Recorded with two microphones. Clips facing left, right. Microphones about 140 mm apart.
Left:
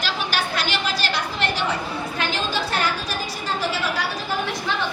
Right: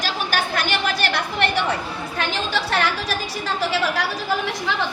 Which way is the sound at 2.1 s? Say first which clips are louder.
Right 2 dB; 75° right (ahead or behind).